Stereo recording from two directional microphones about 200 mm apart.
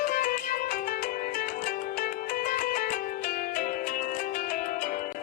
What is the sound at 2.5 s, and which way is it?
Music, 40° left (ahead or behind).